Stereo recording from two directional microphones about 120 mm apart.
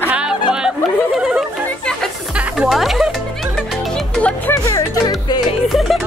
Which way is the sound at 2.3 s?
5° right (ahead or behind).